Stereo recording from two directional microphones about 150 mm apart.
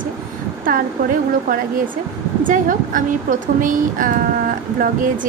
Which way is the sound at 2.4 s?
60° right (ahead or behind).